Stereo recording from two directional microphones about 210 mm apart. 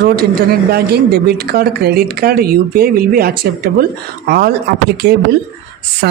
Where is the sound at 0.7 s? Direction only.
50° right (ahead or behind).